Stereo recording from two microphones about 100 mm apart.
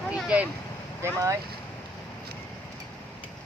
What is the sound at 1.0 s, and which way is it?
Speech, 25° right (ahead or behind).